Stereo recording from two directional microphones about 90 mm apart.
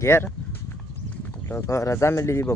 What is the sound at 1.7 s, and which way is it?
Speech, 35° left (ahead or behind).